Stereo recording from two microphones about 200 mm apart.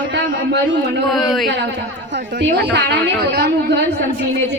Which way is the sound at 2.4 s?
60° right (ahead or behind).